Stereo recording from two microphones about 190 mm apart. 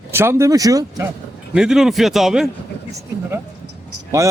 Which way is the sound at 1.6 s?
5° right (ahead or behind).